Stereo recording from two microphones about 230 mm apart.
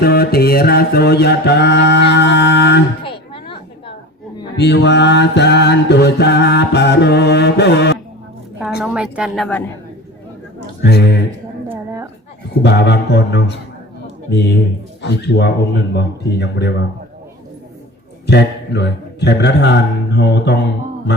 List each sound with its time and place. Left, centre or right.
0.0 s mantra: left
3.0 s a sound: left
4.5 s mantra: left
8.8 s a woman's voice: centre
10.8 s mantra: left
11.7 s a woman's voice: centre
12.6 s mantra: left
18.3 s mantra: left